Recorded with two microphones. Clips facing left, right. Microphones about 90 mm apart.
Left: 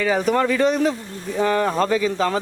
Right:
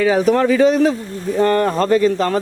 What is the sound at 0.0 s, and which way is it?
Speech, 5° right (ahead or behind).